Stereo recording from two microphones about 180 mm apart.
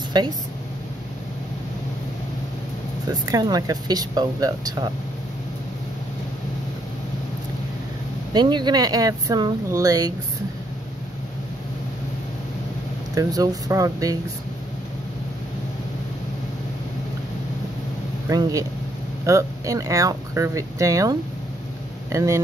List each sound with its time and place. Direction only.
0.2 s speech: 25° right (ahead or behind)
3.1 s speech: 20° right (ahead or behind)
8.3 s speech: 25° right (ahead or behind)
13.1 s speech: 20° right (ahead or behind)
18.3 s speech: 20° right (ahead or behind)